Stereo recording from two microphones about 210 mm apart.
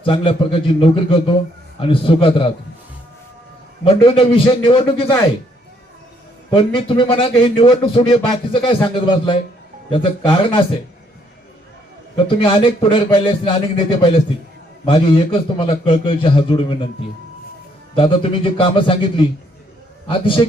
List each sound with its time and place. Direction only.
0.0 s a man's voice: 25° left (ahead or behind)
3.8 s a man's voice: 25° left (ahead or behind)
6.5 s a man's voice: 25° left (ahead or behind)
12.1 s a man's voice: 25° left (ahead or behind)
17.9 s a man's voice: 25° left (ahead or behind)